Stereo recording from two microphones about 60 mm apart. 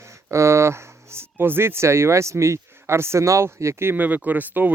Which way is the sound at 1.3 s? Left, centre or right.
Right.